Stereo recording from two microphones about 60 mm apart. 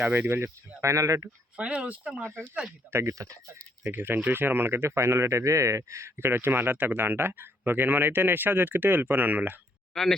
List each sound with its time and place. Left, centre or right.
0.0 s speech: right
0.8 s speech: right
1.5 s speech: right
2.9 s speech: right
3.9 s speech: right
9.9 s speech: centre